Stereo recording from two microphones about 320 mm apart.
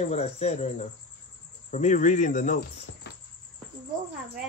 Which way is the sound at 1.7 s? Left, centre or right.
Left.